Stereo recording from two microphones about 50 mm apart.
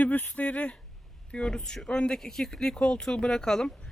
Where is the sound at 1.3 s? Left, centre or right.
Centre.